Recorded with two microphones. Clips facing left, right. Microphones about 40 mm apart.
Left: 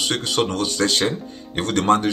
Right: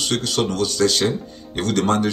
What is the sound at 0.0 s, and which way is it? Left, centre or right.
Speech, left.